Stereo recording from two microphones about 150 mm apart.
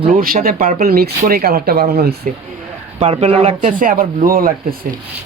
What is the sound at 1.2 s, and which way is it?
Speech, 75° right (ahead or behind).